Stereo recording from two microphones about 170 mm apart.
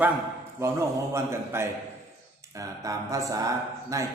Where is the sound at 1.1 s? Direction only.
15° right (ahead or behind).